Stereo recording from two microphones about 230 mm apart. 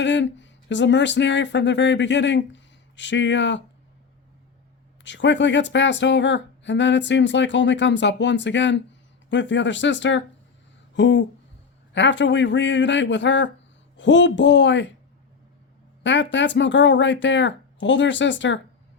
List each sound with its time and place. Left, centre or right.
0.0 s speech: left
5.0 s speech: left
16.0 s speech: left